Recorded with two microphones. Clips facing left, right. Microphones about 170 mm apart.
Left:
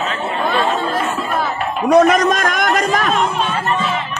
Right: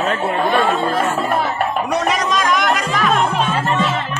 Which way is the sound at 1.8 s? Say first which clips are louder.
Left 8 dB; 50° left (ahead or behind).